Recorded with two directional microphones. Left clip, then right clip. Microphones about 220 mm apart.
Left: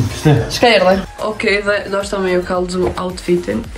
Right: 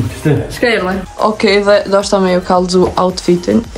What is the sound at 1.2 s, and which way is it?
Speech, 20° right (ahead or behind).